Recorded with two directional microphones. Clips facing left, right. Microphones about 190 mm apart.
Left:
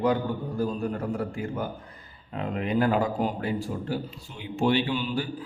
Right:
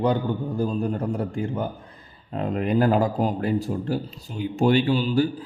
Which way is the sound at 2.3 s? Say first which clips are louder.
Right 4 dB; 40° right (ahead or behind).